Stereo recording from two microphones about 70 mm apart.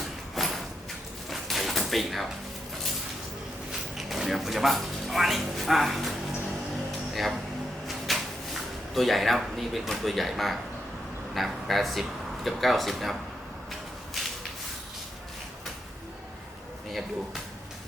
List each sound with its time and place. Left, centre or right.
0.3 s a sound: centre
3.7 s speech: centre
7.9 s cupboard open or close: centre
9.0 s speech: centre